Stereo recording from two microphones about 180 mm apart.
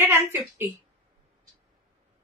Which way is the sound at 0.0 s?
15° right (ahead or behind).